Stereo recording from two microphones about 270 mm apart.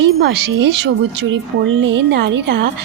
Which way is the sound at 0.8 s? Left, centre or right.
Right.